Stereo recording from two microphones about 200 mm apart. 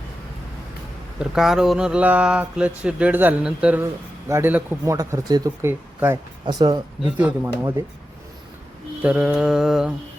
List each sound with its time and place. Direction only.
1.2 s speech: centre (ahead or behind); by 6.8 s 20° right (ahead or behind)
7.0 s speech: 5° right (ahead or behind)
9.0 s speech: 5° right (ahead or behind)